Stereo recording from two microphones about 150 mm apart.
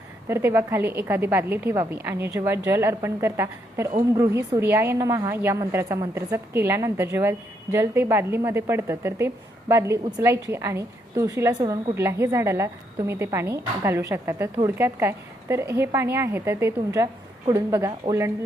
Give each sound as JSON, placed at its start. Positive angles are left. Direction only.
{"t": 0.3, "sound": "a woman's voice", "side_deg": -15}